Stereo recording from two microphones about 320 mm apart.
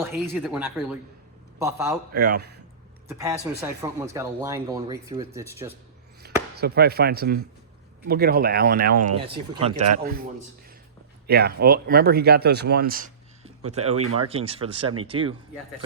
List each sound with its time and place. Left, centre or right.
0.0 s speech: centre
2.1 s speech: right
3.1 s speech: centre
6.2 s chop: right
6.6 s speech: right
9.1 s speech: centre
11.3 s speech: right
14.0 s speech: right
14.3 s speech: centre